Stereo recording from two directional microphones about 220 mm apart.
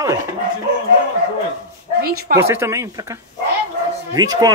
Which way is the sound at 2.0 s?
45° right (ahead or behind).